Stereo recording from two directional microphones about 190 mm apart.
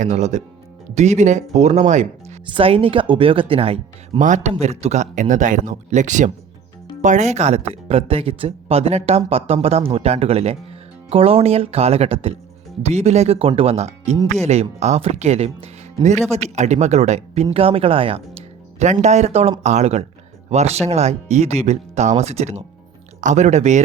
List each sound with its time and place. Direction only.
0.0 s speech: 40° right (ahead or behind)